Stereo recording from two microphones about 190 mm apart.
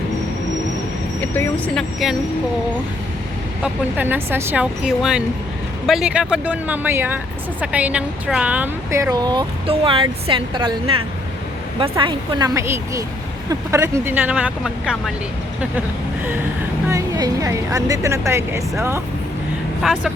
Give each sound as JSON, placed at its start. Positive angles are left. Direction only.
{"t": 1.2, "sound": "speech", "side_deg": 10}
{"t": 3.6, "sound": "a woman's voice", "side_deg": -10}
{"t": 16.9, "sound": "a woman's voice", "side_deg": -20}
{"t": 19.8, "sound": "speech", "side_deg": 0}